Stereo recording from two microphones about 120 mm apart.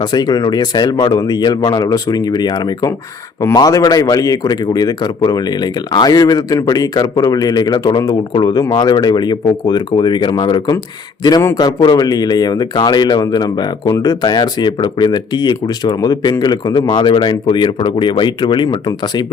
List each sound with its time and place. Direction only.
0.0 s speech: 35° left (ahead or behind)